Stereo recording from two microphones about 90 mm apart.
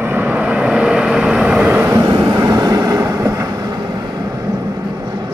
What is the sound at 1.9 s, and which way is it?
Vehicle, 50° right (ahead or behind).